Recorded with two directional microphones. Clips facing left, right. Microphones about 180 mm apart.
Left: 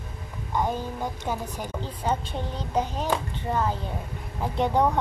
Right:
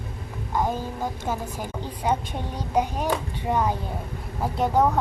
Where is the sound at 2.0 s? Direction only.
10° right (ahead or behind).